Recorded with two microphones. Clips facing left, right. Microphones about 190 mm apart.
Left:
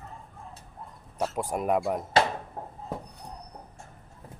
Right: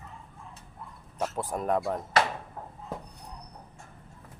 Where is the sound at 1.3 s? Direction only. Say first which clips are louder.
Left 2 dB; 10° left (ahead or behind).